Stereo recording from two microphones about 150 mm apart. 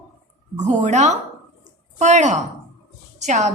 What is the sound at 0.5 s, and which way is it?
A woman's voice, 50° right (ahead or behind).